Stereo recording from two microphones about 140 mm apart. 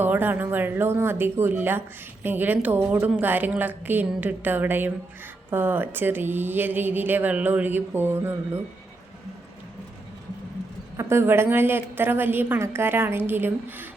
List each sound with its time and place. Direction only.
0.0 s a woman's voice: 15° right (ahead or behind)
10.9 s a woman's voice: 20° right (ahead or behind)